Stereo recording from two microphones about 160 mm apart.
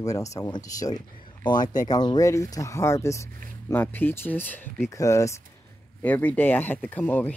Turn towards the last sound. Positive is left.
turn(degrees=10)  # may be behind; listen again after turning